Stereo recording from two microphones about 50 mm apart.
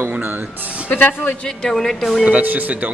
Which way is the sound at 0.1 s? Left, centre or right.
Right.